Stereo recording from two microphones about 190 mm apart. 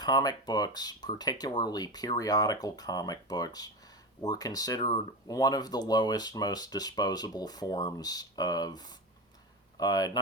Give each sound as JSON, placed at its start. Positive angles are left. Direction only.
{"t": 0.0, "sound": "speech", "side_deg": 20}